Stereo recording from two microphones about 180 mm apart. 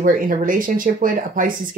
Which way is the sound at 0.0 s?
50° right (ahead or behind).